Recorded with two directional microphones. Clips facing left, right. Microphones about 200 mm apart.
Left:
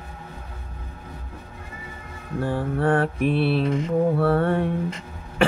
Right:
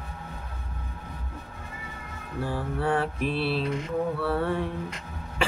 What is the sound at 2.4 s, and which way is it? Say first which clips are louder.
Mantra: left 5 dB; 50° left (ahead or behind).